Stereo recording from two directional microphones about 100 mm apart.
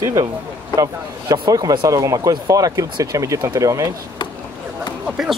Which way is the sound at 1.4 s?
40° right (ahead or behind).